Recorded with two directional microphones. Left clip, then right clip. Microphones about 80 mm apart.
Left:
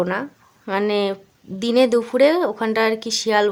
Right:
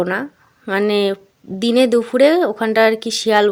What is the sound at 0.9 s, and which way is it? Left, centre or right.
A woman's voice, right.